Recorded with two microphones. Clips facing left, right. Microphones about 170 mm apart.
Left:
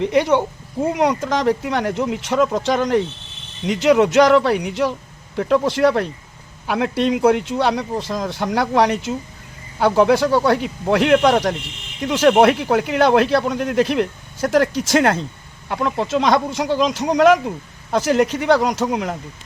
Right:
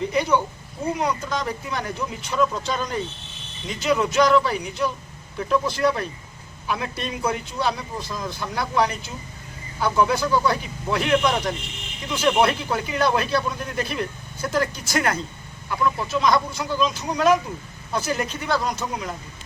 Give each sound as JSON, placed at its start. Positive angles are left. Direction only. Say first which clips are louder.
{"t": 0.0, "sound": "a man's voice", "louder": "left 5 dB", "side_deg": 80}
{"t": 12.4, "sound": "a man's voice", "louder": "left 7 dB", "side_deg": 70}